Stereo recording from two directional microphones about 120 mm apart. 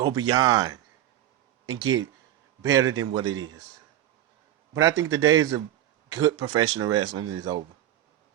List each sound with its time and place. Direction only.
0.0 s speech: 35° right (ahead or behind)
4.7 s a man's voice: 25° right (ahead or behind)